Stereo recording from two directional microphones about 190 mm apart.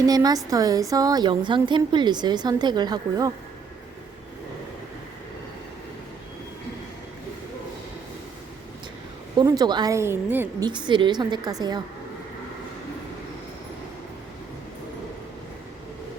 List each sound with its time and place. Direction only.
0.0 s a woman's voice: 20° right (ahead or behind)
9.4 s a woman's voice: 20° right (ahead or behind)
10.7 s a woman's voice: 25° right (ahead or behind)